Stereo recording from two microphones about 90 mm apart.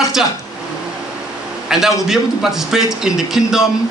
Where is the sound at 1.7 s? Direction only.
5° right (ahead or behind).